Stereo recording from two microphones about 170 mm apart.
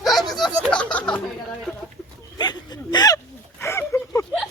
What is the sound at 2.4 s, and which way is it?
Speech, 25° left (ahead or behind).